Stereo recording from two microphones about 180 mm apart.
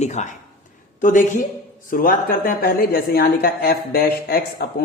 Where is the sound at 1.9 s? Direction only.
50° left (ahead or behind).